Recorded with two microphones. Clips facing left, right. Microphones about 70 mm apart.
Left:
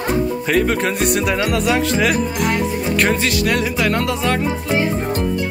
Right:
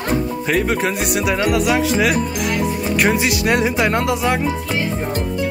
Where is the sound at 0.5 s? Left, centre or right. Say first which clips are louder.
Even; centre.